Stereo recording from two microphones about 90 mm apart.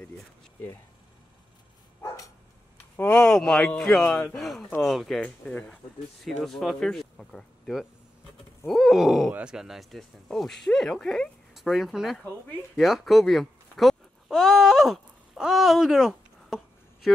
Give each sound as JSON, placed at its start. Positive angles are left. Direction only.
{"t": 2.0, "sound": "dog", "side_deg": 35}
{"t": 3.0, "sound": "speech", "side_deg": 10}
{"t": 6.2, "sound": "speech", "side_deg": 0}